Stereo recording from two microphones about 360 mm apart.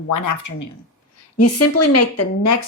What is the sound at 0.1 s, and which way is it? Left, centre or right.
Speech, left.